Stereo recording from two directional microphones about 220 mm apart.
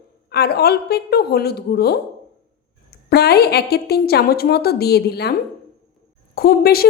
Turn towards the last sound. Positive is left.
turn(degrees=45)  # may be behind; listen again after turning